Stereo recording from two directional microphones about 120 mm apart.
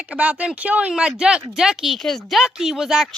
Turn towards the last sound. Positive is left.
turn(degrees=-5)  # may be behind; listen again after turning